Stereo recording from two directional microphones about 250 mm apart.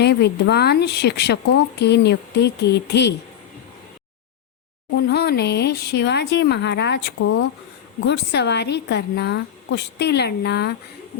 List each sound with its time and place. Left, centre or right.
0.0 s speech: left
4.9 s speech: left